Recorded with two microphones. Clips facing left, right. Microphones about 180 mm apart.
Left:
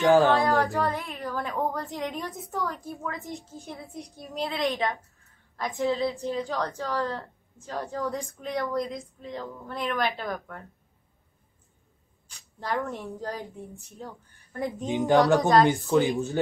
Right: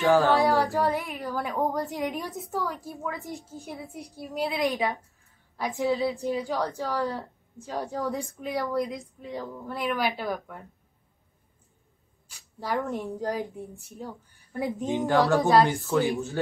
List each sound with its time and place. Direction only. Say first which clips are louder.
0.1 s a sound: left 1 dB; 20° left (ahead or behind)
0.4 s a woman's voice: right 1 dB; 15° right (ahead or behind)
2.1 s a woman's voice: right 1 dB; centre (ahead or behind)
3.6 s a woman's voice: right 2 dB; 15° right (ahead or behind)
4.2 s a woman's voice: right 2 dB; centre (ahead or behind)
4.7 s a woman's voice: right 1 dB; 15° right (ahead or behind)
9.2 s a woman's voice: right 1 dB; 10° right (ahead or behind)
12.5 s a woman's voice: right 1 dB; 15° right (ahead or behind)
15.0 s speech: left 2 dB; 20° left (ahead or behind)